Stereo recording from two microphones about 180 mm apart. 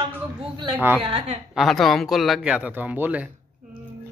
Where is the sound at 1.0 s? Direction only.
35° right (ahead or behind).